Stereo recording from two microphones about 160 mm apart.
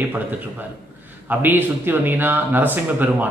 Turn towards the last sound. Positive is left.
turn(degrees=-10)  # may be behind; listen again after turning